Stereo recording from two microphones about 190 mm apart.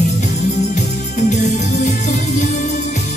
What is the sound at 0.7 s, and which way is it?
Music, 40° left (ahead or behind).